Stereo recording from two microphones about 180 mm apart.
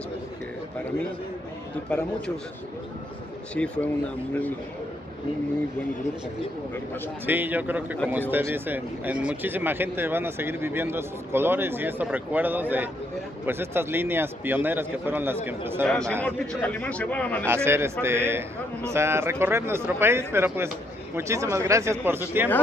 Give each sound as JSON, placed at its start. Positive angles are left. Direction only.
{"t": 1.9, "sound": "speech", "side_deg": 5}
{"t": 3.5, "sound": "speech", "side_deg": 5}
{"t": 7.2, "sound": "speech", "side_deg": -10}
{"t": 15.8, "sound": "a man's voice", "side_deg": 5}
{"t": 17.5, "sound": "speech", "side_deg": -15}